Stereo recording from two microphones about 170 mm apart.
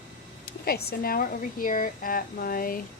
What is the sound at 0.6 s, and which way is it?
A woman's voice, 65° left (ahead or behind).